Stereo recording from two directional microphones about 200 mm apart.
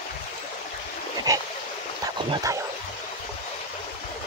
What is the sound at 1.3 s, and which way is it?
Stream, 15° right (ahead or behind).